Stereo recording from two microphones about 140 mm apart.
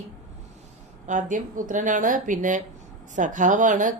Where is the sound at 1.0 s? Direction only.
65° right (ahead or behind).